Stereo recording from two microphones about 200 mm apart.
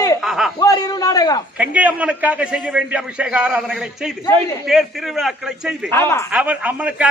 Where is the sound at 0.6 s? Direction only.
20° left (ahead or behind).